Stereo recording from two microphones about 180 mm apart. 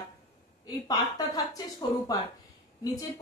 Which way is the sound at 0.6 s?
20° left (ahead or behind).